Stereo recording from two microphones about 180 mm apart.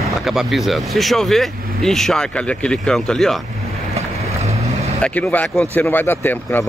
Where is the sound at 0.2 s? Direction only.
Centre (ahead or behind).